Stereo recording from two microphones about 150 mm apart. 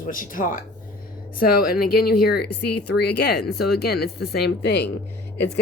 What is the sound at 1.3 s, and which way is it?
Speech, 80° left.